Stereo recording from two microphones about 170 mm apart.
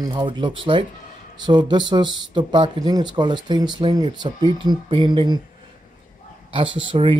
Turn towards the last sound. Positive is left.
turn(degrees=-30)  # may be behind; listen again after turning